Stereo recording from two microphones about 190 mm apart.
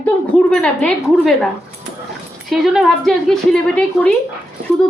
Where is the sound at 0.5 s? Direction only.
5° left (ahead or behind).